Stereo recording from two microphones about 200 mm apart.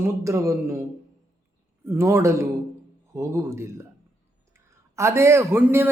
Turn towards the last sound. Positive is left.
turn(degrees=-10)  # may be behind; listen again after turning